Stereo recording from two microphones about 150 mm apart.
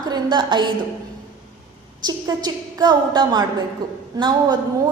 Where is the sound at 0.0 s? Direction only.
30° right (ahead or behind).